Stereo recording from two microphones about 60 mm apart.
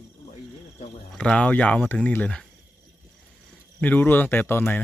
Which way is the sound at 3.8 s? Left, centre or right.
Left.